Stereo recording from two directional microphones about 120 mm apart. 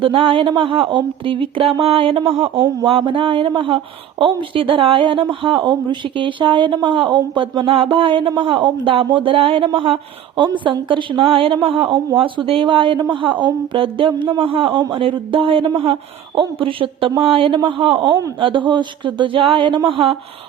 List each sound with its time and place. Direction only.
0.0 s speech: 45° right (ahead or behind)